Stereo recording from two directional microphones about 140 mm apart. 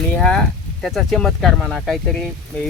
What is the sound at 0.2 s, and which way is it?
Speech, 5° left (ahead or behind).